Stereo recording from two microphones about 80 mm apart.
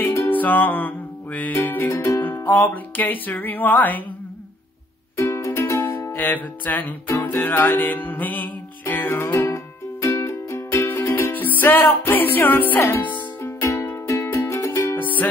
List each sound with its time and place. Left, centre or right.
0.0 s music: left
0.3 s music: left
1.9 s music: left
2.7 s music: left
5.1 s music: left
13.4 s music: left